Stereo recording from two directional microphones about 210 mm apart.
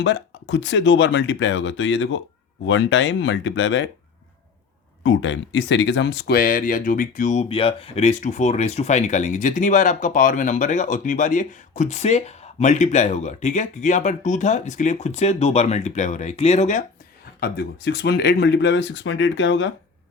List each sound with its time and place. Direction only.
0.0 s speech: 60° left (ahead or behind)
5.0 s speech: 60° left (ahead or behind); by 16.8 s 35° left (ahead or behind)
17.4 s speech: 50° left (ahead or behind)